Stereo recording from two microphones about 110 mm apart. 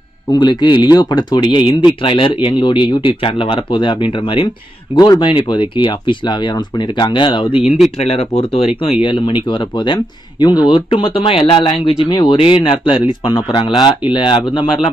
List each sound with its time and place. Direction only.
0.3 s speech: 45° left (ahead or behind)
4.9 s speech: 35° left (ahead or behind)
8.0 s speech: 65° left (ahead or behind)
9.0 s speech: 45° left (ahead or behind)
12.4 s speech: 55° left (ahead or behind)